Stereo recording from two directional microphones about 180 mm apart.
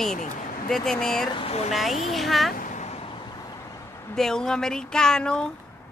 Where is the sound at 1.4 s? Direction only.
35° left (ahead or behind).